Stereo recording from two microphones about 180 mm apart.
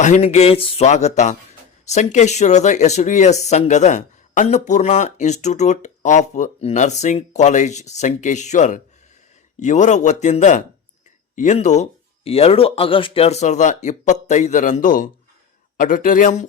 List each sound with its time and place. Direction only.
0.0 s a man's voice: 40° left (ahead or behind)